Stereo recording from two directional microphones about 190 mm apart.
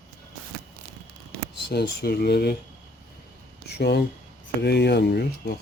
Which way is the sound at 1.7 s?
55° left (ahead or behind).